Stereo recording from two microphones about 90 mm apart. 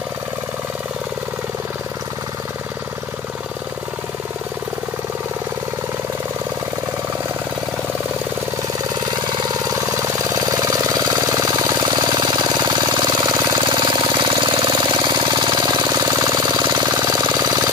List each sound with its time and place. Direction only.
9.8 s jackhammer: 35° right (ahead or behind)
13.7 s jackhammer: 65° right (ahead or behind); by 17.6 s 45° right (ahead or behind)